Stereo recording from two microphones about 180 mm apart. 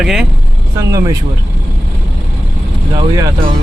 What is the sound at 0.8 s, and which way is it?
Speech, 20° right (ahead or behind).